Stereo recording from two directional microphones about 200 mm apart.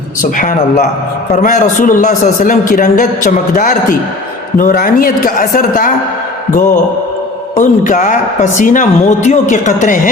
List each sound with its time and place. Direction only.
0.2 s a man's voice: 40° left (ahead or behind)
7.5 s a man's voice: 40° left (ahead or behind)